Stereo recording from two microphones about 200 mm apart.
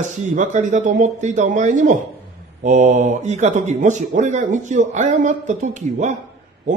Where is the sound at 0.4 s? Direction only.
35° right (ahead or behind).